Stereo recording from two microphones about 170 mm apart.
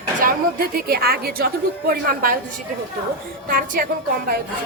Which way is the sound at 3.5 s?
55° right (ahead or behind).